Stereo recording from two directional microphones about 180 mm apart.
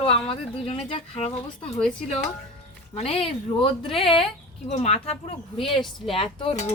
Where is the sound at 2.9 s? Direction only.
35° left (ahead or behind).